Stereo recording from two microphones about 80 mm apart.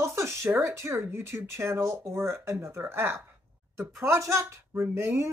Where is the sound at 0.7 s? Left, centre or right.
Right.